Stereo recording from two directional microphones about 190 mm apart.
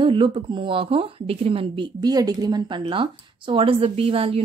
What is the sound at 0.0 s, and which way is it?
Speech, 25° right (ahead or behind).